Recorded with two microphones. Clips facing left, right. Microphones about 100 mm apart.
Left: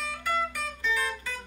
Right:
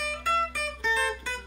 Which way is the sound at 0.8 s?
30° right (ahead or behind).